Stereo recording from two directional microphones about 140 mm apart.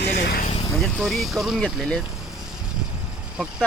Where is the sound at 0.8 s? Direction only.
Centre (ahead or behind).